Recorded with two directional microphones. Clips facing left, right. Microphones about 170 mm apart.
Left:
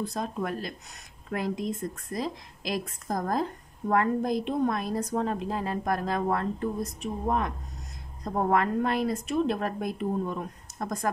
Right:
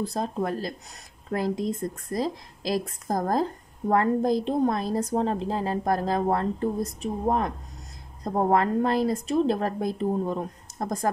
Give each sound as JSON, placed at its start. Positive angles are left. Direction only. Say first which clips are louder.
{"t": 0.0, "sound": "speech", "louder": "right 3 dB", "side_deg": -35}